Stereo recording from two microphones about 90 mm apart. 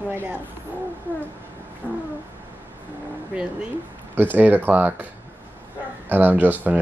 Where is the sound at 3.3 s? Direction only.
15° right (ahead or behind).